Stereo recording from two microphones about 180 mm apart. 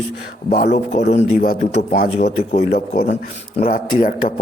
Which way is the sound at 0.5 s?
50° left (ahead or behind).